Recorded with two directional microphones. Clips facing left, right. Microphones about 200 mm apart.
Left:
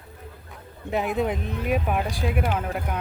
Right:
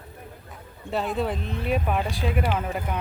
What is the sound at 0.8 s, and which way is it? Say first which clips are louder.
Speech: left 2 dB; 15° left (ahead or behind).